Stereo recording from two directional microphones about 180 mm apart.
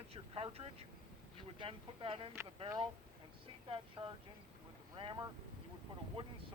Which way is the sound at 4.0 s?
30° right (ahead or behind).